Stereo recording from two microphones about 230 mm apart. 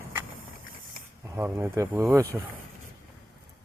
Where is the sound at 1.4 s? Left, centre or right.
Centre.